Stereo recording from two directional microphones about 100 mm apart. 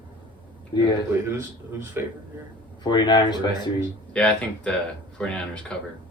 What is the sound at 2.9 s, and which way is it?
Speech, 50° left (ahead or behind).